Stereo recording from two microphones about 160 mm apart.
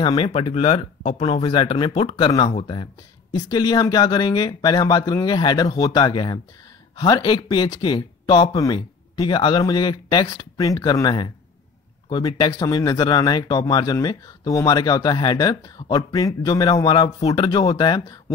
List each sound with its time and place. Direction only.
0.0 s speech: 30° left (ahead or behind)